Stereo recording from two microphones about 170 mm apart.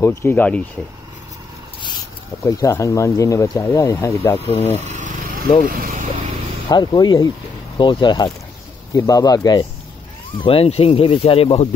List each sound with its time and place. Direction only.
0.2 s speech: 10° left (ahead or behind)
2.4 s speech: 20° left (ahead or behind)
4.5 s speech: 35° left (ahead or behind)
4.8 s vehicle: 45° right (ahead or behind)
5.7 s speech: 55° right (ahead or behind)
6.7 s speech: 25° left (ahead or behind)
10.4 s speech: 35° left (ahead or behind)